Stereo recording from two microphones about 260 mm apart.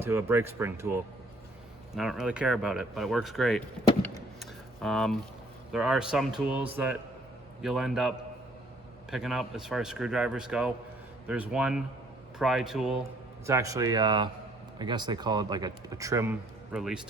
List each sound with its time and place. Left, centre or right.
0.0 s speech: centre
2.0 s speech: centre
4.4 s a sound: centre
5.7 s speech: centre